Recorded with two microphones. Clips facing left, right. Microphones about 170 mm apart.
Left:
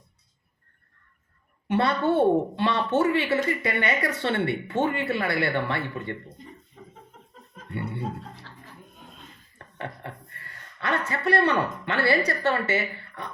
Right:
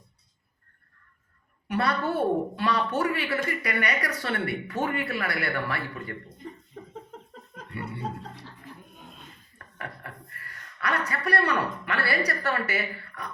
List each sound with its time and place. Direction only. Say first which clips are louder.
1.6 s speech: left 4 dB; 25° left (ahead or behind)
9.6 s speech: left 4 dB; 25° left (ahead or behind)